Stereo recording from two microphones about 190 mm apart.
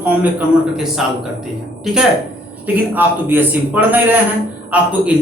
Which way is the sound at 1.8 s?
Centre (ahead or behind).